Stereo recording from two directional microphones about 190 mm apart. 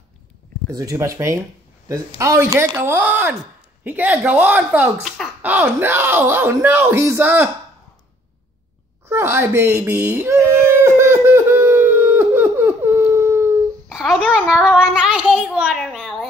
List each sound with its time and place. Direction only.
0.7 s speech: 20° right (ahead or behind)
9.0 s a sound: 15° right (ahead or behind)
13.8 s a child's voice: centre (ahead or behind)